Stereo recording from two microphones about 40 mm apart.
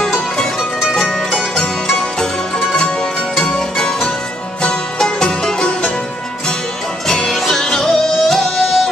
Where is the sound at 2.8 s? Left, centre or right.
Centre.